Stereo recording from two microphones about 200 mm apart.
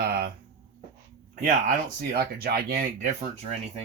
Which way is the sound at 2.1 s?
50° right (ahead or behind).